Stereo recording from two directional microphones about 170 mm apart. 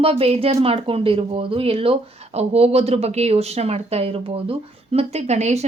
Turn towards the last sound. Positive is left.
turn(degrees=-40)  # may be behind; listen again after turning